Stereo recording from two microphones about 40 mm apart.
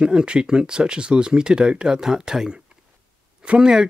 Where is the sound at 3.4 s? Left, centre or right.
Right.